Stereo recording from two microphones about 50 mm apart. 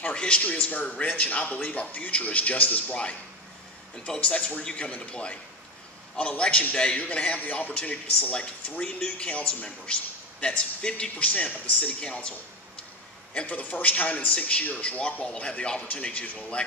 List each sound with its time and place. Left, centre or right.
0.0 s a man's voice: left
0.8 s a man's voice: left
4.2 s a man's voice: left
11.1 s a man's voice: left